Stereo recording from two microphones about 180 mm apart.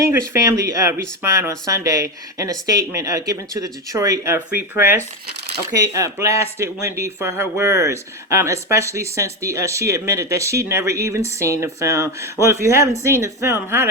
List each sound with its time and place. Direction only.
0.0 s speech: 15° right (ahead or behind)
5.9 s speech: 15° right (ahead or behind)